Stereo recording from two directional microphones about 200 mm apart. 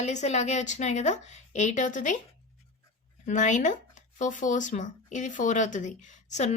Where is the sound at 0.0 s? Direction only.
35° left (ahead or behind).